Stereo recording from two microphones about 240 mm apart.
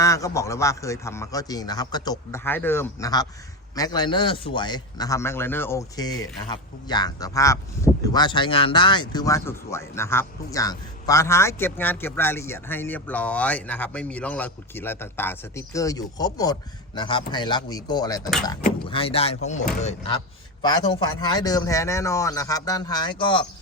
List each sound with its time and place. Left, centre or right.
0.0 s a man's voice: centre